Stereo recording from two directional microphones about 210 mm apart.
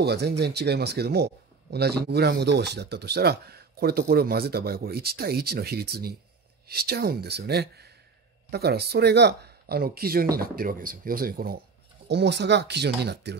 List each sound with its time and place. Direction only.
0.0 s speech: 50° right (ahead or behind)